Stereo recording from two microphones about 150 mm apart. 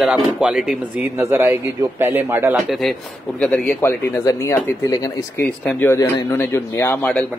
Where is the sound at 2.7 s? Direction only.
Centre (ahead or behind).